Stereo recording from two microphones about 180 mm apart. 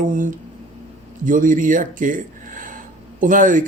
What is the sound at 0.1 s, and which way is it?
Speech, 45° right (ahead or behind).